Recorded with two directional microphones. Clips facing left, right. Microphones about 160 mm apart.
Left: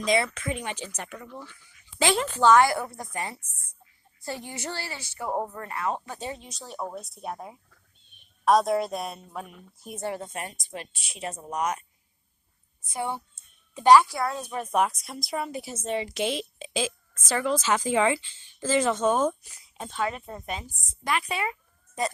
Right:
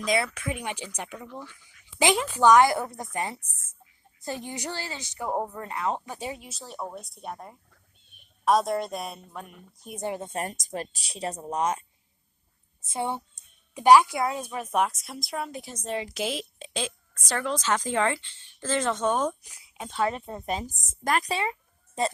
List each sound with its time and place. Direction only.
0.0 s a woman's voice: centre (ahead or behind)
10.0 s speech: 15° right (ahead or behind)
10.2 s speech: 40° right (ahead or behind)
12.8 s a woman's voice: 25° right (ahead or behind); by 19.4 s 5° left (ahead or behind)
19.4 s a sound: 10° right (ahead or behind)
20.0 s speech: 30° right (ahead or behind)